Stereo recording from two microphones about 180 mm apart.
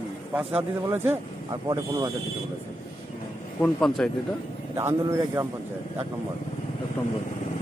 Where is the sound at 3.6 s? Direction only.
Centre (ahead or behind).